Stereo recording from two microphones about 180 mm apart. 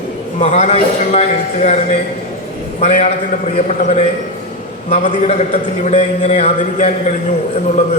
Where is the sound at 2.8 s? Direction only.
35° left (ahead or behind).